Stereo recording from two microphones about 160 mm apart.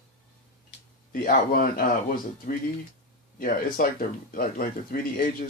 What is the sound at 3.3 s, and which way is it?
Speech, 60° left (ahead or behind).